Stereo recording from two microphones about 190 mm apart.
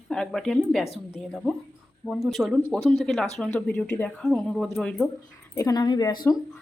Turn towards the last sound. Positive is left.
turn(degrees=20)  # may be behind; listen again after turning